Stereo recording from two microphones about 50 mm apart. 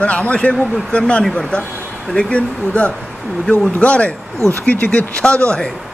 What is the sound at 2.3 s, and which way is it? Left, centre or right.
A man's voice, left.